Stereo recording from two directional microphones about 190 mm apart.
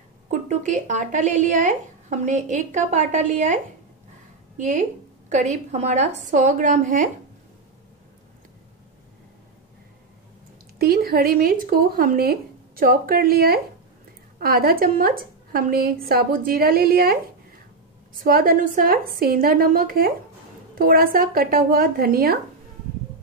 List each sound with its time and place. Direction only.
0.3 s speech: 40° right (ahead or behind)
4.6 s speech: 40° right (ahead or behind)
10.8 s a woman's voice: 55° right (ahead or behind)
18.2 s a woman's voice: 50° right (ahead or behind)